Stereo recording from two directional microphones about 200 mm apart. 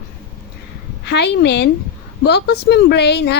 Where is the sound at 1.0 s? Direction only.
60° left (ahead or behind).